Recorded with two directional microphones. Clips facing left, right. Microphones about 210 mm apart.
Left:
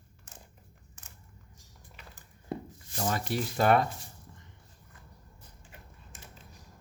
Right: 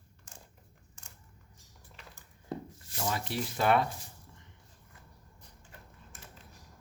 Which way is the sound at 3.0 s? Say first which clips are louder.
Left 3 dB; 45° left (ahead or behind).